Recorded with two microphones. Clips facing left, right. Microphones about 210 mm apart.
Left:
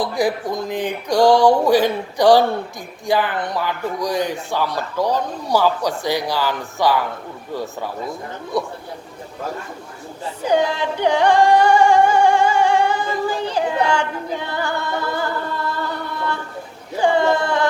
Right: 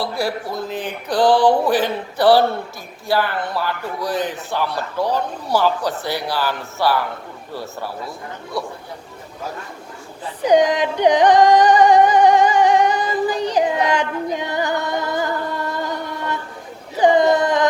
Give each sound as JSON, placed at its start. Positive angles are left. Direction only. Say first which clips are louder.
{"t": 0.0, "sound": "a man's voice", "louder": "left 3 dB", "side_deg": 15}
{"t": 10.4, "sound": "music", "louder": "right 4 dB", "side_deg": -15}
{"t": 17.0, "sound": "speech", "louder": "right 3 dB", "side_deg": -15}